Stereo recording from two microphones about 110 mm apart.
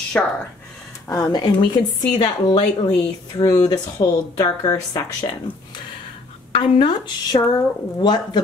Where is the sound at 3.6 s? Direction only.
35° left (ahead or behind).